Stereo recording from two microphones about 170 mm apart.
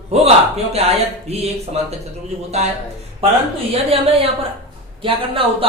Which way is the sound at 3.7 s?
35° right (ahead or behind).